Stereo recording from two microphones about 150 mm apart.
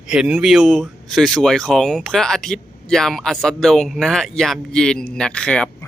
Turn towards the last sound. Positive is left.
turn(degrees=5)  # may be behind; listen again after turning